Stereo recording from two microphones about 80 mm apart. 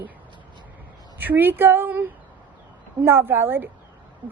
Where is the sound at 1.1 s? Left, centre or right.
Right.